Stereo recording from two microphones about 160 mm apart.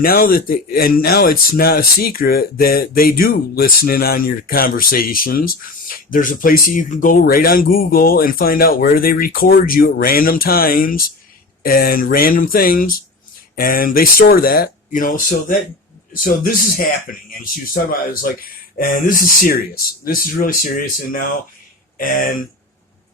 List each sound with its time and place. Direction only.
0.0 s speech: 65° left (ahead or behind)
18.8 s speech: 60° left (ahead or behind)